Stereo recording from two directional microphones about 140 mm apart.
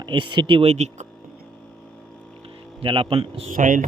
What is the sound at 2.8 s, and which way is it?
Speech, 40° right (ahead or behind).